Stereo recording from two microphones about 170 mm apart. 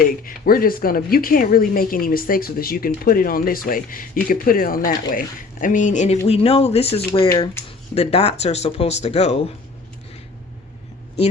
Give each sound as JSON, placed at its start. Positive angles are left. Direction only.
{"t": 0.3, "sound": "speech", "side_deg": 60}
{"t": 6.2, "sound": "speech", "side_deg": 35}